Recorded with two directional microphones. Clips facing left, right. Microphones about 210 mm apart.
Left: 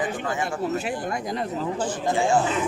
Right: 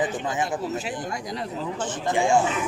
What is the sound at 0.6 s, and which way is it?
Speech, 55° left (ahead or behind).